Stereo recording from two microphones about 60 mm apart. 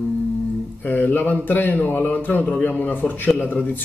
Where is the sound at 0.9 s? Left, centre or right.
Left.